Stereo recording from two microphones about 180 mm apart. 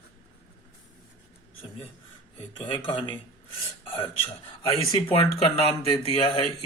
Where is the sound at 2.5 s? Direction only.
25° left (ahead or behind).